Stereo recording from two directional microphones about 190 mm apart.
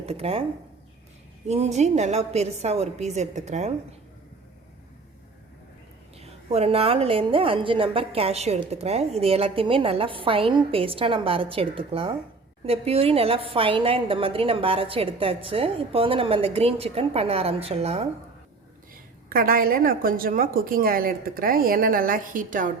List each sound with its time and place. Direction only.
0.0 s a woman's voice: 30° right (ahead or behind)
1.5 s a woman's voice: 35° right (ahead or behind)
6.1 s a woman's voice: 35° right (ahead or behind)
19.3 s a woman's voice: 50° right (ahead or behind)